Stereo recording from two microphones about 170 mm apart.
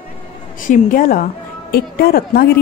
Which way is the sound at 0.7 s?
55° left (ahead or behind).